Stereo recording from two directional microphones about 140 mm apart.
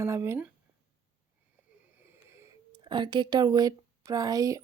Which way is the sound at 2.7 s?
35° right (ahead or behind).